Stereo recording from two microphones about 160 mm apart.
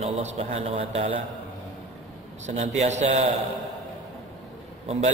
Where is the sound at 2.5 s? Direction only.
45° right (ahead or behind).